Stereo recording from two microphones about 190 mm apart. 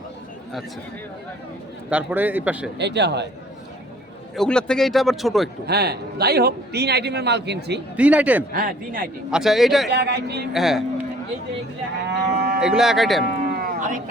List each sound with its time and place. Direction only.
1.9 s a man's voice: 5° right (ahead or behind)
2.7 s a man's voice: 65° right (ahead or behind)
4.4 s speech: 5° left (ahead or behind)
5.6 s a man's voice: 55° right (ahead or behind)
7.9 s a man's voice: 5° right (ahead or behind)
8.5 s speech: 50° right (ahead or behind)
9.3 s speech: centre (ahead or behind)
10.1 s a man's voice: 60° right (ahead or behind)
10.5 s speech: centre (ahead or behind)
12.0 s moo: 60° right (ahead or behind)
12.5 s speech: 5° right (ahead or behind)
13.3 s a sound: 50° right (ahead or behind)